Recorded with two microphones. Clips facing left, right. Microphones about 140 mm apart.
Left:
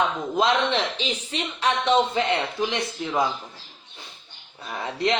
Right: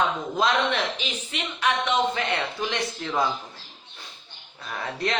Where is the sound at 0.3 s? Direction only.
25° left (ahead or behind).